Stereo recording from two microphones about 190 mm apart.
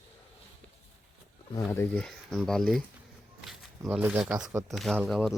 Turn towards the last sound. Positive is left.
turn(degrees=0)  # may be behind; listen again after turning